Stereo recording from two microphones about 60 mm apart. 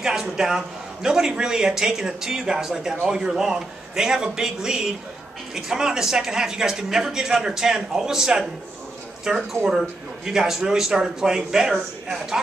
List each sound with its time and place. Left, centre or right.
0.0 s speech: centre